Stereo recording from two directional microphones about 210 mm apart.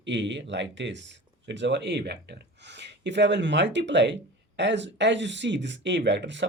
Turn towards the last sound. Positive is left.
turn(degrees=-55)  # may be behind; listen again after turning